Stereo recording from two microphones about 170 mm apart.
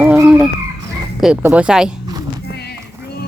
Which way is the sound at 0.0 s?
10° right (ahead or behind).